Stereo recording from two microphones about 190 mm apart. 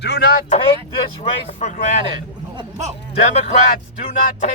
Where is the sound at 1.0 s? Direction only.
30° left (ahead or behind).